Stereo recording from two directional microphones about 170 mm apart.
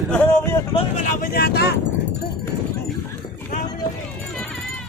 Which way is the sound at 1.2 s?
65° left (ahead or behind).